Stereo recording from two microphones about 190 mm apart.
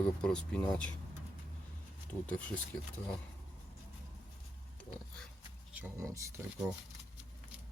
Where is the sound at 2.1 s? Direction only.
5° left (ahead or behind).